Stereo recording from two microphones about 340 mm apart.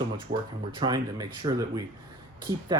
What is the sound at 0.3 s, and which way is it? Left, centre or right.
Speech, right.